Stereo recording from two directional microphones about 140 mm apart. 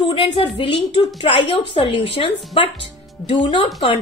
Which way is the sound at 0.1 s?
40° left (ahead or behind).